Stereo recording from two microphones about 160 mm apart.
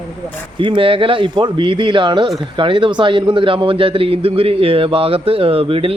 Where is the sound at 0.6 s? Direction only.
30° right (ahead or behind).